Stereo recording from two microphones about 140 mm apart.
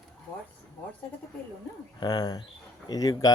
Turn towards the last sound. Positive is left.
turn(degrees=25)  # may be behind; listen again after turning